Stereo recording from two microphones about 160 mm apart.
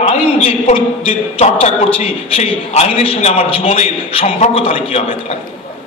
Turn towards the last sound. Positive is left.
turn(degrees=35)  # may be behind; listen again after turning